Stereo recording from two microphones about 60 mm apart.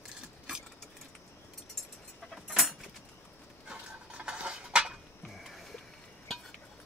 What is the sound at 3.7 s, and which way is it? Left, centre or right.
Cutlery, centre.